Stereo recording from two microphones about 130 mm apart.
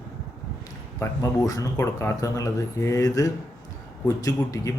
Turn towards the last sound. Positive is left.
turn(degrees=25)  # may be behind; listen again after turning